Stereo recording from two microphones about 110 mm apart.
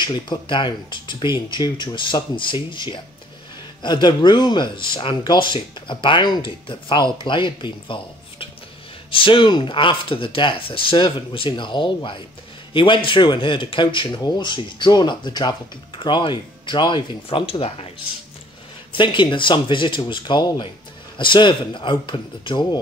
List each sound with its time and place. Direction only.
0.0 s speech: 45° left (ahead or behind); by 17.8 s 60° left (ahead or behind)
18.9 s speech: 45° left (ahead or behind)